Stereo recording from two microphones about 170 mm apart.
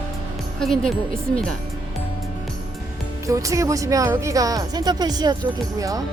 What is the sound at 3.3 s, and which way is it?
Speech, 20° right (ahead or behind).